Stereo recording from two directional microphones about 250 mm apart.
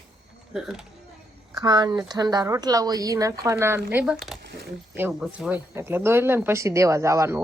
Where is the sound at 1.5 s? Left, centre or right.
Centre.